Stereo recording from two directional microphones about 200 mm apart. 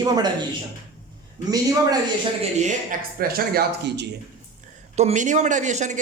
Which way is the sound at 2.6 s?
45° right (ahead or behind).